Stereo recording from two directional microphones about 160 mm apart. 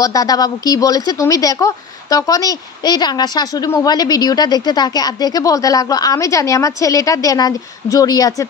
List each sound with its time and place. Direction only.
0.0 s a woman's voice: 20° left (ahead or behind)